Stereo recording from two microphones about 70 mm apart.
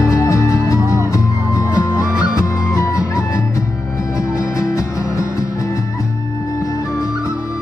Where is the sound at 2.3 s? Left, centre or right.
Left.